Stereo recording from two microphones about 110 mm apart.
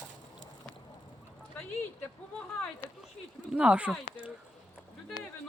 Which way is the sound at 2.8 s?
20° left (ahead or behind).